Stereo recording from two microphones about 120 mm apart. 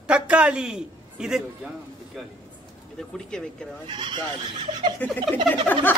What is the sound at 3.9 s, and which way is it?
Speech, 40° right (ahead or behind).